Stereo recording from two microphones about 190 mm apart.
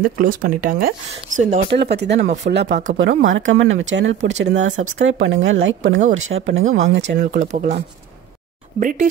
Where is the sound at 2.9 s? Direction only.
85° right.